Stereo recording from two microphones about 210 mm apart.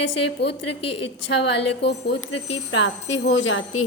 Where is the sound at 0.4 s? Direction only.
55° left (ahead or behind).